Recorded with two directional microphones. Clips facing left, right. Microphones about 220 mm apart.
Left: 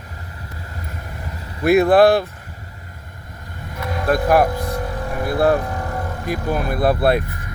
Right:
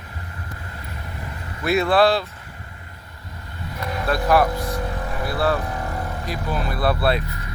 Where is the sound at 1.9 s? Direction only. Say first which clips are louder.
Left 3 dB; 55° left (ahead or behind).